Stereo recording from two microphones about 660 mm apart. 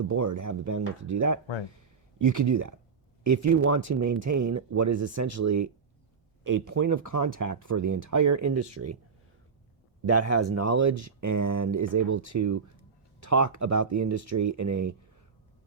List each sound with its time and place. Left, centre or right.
0.1 s speech: right
10.1 s speech: right